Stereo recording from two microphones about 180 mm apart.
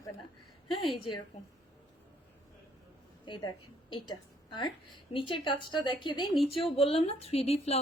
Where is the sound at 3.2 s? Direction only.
25° left (ahead or behind).